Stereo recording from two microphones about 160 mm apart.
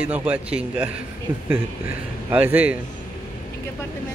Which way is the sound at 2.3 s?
10° right (ahead or behind).